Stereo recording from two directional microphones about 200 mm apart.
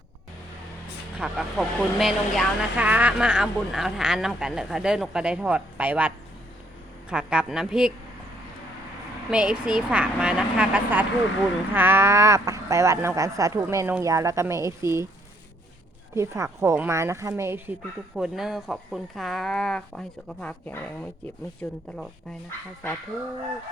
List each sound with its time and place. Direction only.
1.2 s speech: centre (ahead or behind)
9.3 s speech: 5° right (ahead or behind)
16.1 s speech: 15° right (ahead or behind)
18.2 s speech: centre (ahead or behind)